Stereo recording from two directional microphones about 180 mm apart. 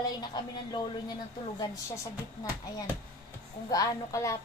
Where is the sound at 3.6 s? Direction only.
20° left (ahead or behind).